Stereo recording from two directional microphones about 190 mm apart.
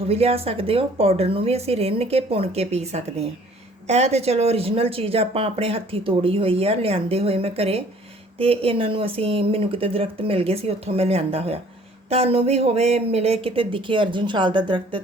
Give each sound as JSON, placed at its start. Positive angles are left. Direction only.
{"t": 0.1, "sound": "speech", "side_deg": -30}